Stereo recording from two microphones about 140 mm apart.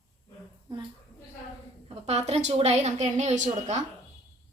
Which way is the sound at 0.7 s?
30° right (ahead or behind).